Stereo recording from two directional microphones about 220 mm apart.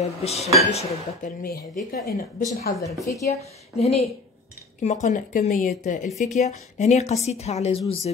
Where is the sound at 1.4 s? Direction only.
40° left (ahead or behind).